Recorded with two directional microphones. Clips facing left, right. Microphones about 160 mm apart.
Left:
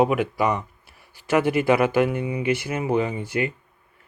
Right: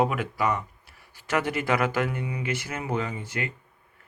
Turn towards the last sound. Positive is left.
turn(degrees=15)  # may be behind; listen again after turning